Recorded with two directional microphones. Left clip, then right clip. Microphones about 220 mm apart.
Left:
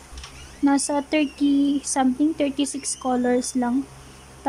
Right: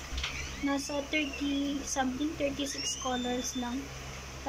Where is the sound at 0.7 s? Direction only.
45° left (ahead or behind).